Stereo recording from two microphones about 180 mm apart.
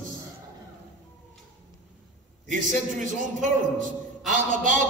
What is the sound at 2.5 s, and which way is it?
Speech, 45° right (ahead or behind).